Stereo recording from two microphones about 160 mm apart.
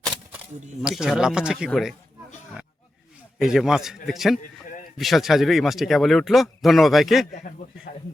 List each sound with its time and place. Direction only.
0.8 s speech: 5° right (ahead or behind)
3.3 s speech: 5° right (ahead or behind)
7.5 s a man's voice: 55° left (ahead or behind)